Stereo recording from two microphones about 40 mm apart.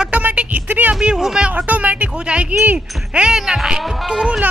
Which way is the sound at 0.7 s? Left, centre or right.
Right.